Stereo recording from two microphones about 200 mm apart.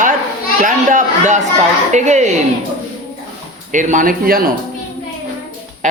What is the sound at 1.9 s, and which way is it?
Speech, 35° right (ahead or behind).